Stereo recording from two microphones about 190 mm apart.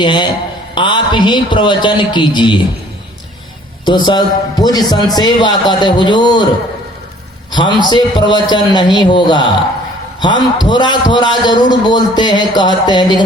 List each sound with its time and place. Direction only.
0.0 s a man's voice: 25° left (ahead or behind)
3.8 s a man's voice: 25° left (ahead or behind)
7.5 s a man's voice: 25° left (ahead or behind)